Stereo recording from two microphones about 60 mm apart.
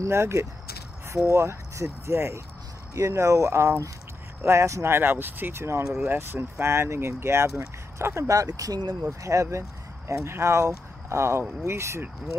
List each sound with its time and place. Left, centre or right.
0.0 s speech: right
4.8 s speech: right
8.3 s speech: right
9.2 s speech: right